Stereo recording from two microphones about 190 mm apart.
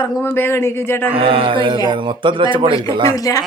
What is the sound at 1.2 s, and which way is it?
A man's voice, 30° right (ahead or behind).